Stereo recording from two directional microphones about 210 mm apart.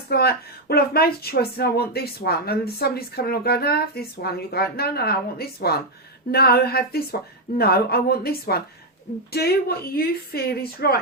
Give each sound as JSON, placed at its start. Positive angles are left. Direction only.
{"t": 0.1, "sound": "speech", "side_deg": 50}